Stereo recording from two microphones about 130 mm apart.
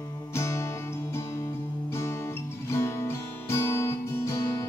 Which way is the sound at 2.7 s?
20° left (ahead or behind).